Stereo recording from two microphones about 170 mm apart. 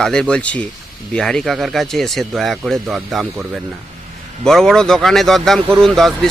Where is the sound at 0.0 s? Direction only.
5° left (ahead or behind).